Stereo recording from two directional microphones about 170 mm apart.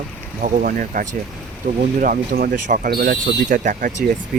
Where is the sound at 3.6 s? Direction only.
50° right (ahead or behind).